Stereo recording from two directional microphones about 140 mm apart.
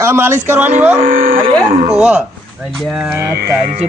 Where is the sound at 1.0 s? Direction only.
90° right.